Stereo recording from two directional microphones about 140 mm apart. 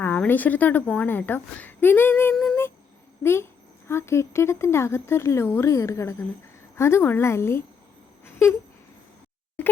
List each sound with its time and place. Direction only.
0.0 s a woman's voice: 15° left (ahead or behind)
2.3 s humming: 5° left (ahead or behind)
3.2 s speech: 20° left (ahead or behind)
8.2 s a sound: 20° left (ahead or behind)